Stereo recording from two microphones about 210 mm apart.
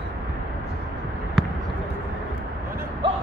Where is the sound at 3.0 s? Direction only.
25° right (ahead or behind).